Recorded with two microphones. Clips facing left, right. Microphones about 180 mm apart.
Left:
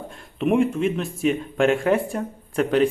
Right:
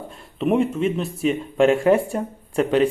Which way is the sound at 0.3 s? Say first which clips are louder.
Even; centre (ahead or behind).